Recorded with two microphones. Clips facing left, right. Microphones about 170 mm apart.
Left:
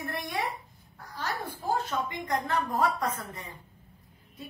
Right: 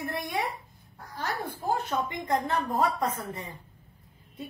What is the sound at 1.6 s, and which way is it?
A woman's voice, 20° right (ahead or behind).